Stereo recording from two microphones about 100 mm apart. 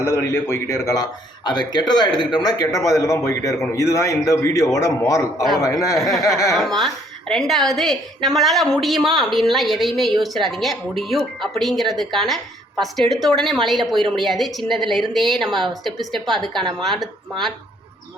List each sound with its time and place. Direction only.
0.0 s a man's voice: 25° left (ahead or behind)
1.5 s a man's voice: 45° left (ahead or behind)
6.5 s a woman's voice: centre (ahead or behind)